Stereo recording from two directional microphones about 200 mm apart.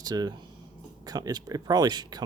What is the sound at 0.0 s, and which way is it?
Speech, 20° right (ahead or behind).